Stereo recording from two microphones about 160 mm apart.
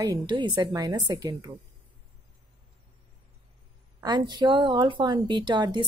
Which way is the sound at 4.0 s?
25° right (ahead or behind).